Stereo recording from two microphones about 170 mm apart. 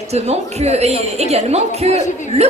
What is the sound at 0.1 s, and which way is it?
A woman's voice, 40° right (ahead or behind).